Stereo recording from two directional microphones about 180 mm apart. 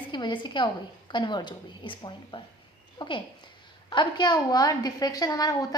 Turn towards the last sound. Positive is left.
turn(degrees=20)  # may be behind; listen again after turning